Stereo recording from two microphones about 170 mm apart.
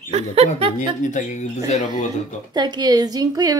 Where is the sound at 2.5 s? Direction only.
25° right (ahead or behind).